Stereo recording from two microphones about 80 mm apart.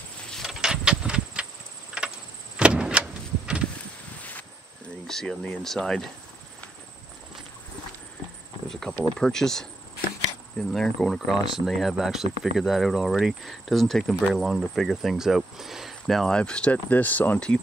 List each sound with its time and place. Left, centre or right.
0.3 s vehicle: centre
4.2 s a sound: centre
5.0 s speech: centre
8.6 s cricket: centre
9.2 s speech: centre
10.7 s speech: centre